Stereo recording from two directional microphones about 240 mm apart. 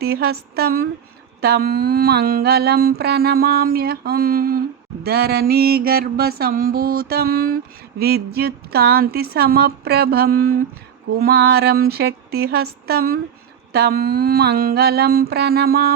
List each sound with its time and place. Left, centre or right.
0.0 s mantra: right